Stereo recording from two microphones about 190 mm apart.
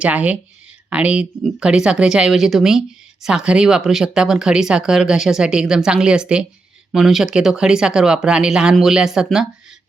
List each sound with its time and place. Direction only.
0.0 s speech: 5° right (ahead or behind)